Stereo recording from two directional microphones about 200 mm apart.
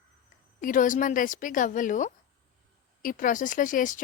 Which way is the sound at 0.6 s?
40° left (ahead or behind).